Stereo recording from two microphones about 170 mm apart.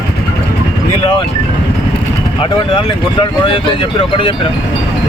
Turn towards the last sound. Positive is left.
turn(degrees=30)  # may be behind; listen again after turning